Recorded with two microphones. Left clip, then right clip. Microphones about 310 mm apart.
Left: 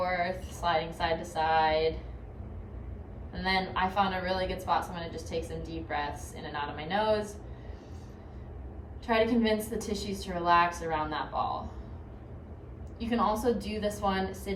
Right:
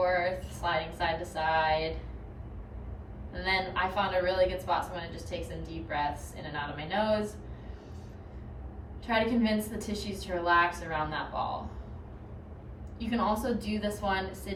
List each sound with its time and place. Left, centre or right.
0.0 s speech: centre
3.3 s a woman's voice: centre
6.4 s a woman's voice: centre
9.0 s a woman's voice: centre
13.0 s a woman's voice: centre